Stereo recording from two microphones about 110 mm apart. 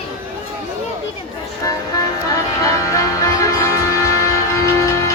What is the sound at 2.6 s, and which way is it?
Music, 30° left (ahead or behind).